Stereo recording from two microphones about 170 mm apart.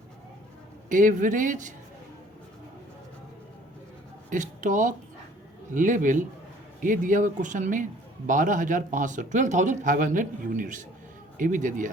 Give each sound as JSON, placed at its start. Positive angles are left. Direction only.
{"t": 0.9, "sound": "speech", "side_deg": -50}
{"t": 4.3, "sound": "speech", "side_deg": -50}